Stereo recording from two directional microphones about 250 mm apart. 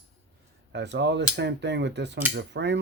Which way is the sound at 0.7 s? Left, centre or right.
Right.